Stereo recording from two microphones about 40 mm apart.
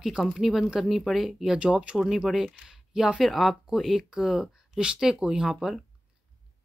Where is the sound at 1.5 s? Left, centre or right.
Right.